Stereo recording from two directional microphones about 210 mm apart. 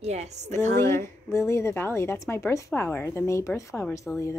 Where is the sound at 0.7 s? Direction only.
10° left (ahead or behind).